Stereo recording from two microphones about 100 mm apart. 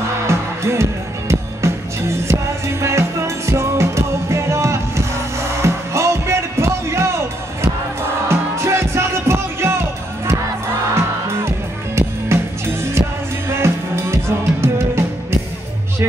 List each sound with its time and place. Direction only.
0.3 s music: 30° right (ahead or behind)